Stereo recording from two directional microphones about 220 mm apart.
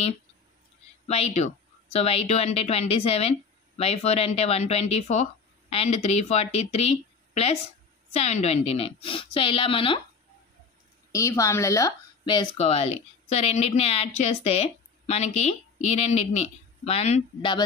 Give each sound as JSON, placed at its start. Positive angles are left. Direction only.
{"t": 1.0, "sound": "speech", "side_deg": 30}
{"t": 11.1, "sound": "speech", "side_deg": 15}